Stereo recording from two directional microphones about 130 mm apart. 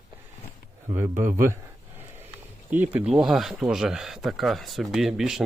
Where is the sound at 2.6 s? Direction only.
10° right (ahead or behind).